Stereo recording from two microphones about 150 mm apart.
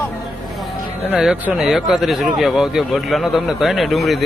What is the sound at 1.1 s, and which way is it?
Speech, 5° right (ahead or behind).